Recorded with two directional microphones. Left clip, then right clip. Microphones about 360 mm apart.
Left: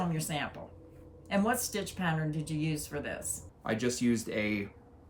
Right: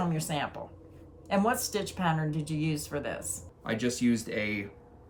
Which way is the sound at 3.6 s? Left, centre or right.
Centre.